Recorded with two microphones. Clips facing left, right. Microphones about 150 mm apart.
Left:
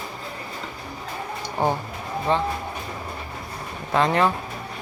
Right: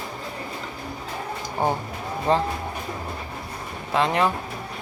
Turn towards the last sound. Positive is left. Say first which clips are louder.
# left 1 dB
turn(degrees=-5)  # may be behind; listen again after turning